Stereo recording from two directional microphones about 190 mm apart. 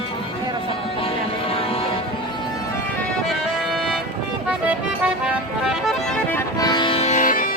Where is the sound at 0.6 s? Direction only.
30° left (ahead or behind).